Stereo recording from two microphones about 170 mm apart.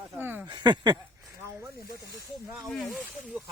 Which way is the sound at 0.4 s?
25° right (ahead or behind).